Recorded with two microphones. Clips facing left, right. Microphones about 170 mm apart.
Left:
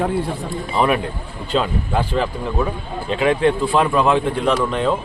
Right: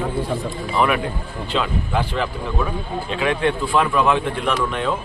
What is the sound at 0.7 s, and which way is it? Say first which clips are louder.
A man's voice: left 1 dB; 35° left (ahead or behind).